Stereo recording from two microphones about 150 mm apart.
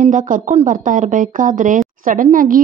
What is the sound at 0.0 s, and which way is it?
A woman's voice, 60° right (ahead or behind).